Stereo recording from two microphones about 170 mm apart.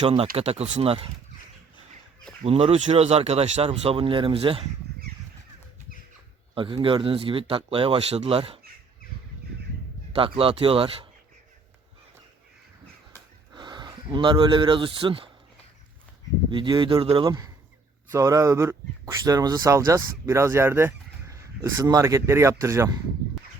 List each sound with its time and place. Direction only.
0.3 s speech: 35° right (ahead or behind)
2.4 s speech: 35° right (ahead or behind)
6.5 s speech: 30° right (ahead or behind)
10.2 s speech: 30° right (ahead or behind)
13.5 s speech: 25° right (ahead or behind)
16.5 s speech: 30° right (ahead or behind)